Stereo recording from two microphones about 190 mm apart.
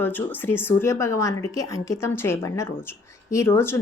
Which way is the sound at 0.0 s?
10° left (ahead or behind).